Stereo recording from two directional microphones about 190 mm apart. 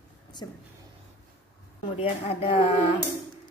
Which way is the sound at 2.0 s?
30° left (ahead or behind).